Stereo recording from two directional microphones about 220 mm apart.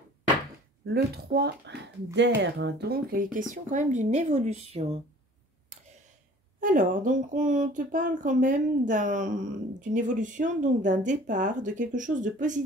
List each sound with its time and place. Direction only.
0.8 s speech: 45° right (ahead or behind); by 5.0 s 25° right (ahead or behind)
6.6 s speech: 35° right (ahead or behind)